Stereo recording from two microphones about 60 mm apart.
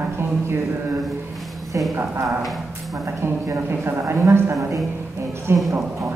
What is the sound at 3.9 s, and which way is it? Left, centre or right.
Speech, right.